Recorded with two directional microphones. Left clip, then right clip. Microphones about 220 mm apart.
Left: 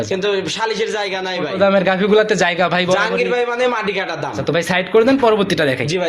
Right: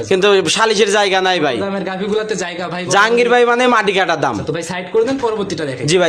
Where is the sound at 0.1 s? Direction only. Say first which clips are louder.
Right 10 dB; 50° right (ahead or behind).